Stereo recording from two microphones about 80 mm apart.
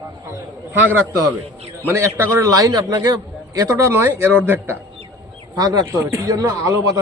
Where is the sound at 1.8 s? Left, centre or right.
Right.